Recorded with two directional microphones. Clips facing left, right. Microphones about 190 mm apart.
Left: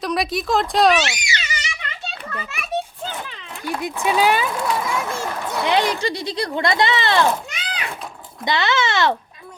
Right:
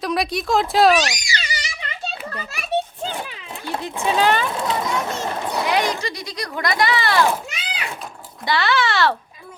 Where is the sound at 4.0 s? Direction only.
10° left (ahead or behind).